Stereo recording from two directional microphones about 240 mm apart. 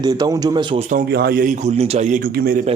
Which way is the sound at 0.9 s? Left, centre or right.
Right.